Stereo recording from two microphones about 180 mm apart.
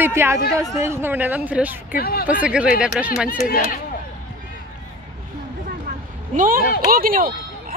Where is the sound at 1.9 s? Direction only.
55° left (ahead or behind).